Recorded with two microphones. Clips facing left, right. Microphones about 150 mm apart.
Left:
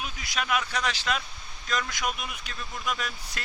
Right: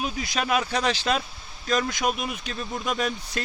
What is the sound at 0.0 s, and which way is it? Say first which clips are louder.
Speech: right 6 dB; 30° right (ahead or behind).